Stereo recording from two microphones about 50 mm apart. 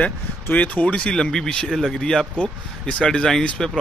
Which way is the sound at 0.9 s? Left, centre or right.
Centre.